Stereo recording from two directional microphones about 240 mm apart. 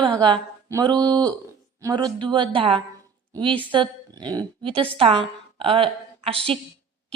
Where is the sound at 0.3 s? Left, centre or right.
Centre.